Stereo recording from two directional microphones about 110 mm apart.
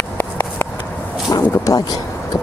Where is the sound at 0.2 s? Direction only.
20° left (ahead or behind).